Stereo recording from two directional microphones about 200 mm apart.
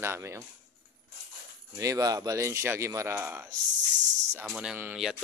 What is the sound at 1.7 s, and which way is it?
Speech, 20° right (ahead or behind).